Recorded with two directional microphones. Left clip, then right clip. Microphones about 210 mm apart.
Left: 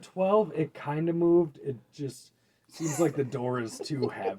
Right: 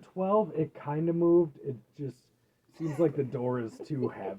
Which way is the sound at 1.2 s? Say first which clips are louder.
Left 1 dB; 40° left (ahead or behind).